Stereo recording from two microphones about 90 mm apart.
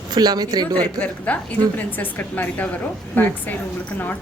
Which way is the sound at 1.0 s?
15° left (ahead or behind).